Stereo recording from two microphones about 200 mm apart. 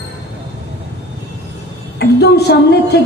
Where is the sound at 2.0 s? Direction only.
55° left (ahead or behind).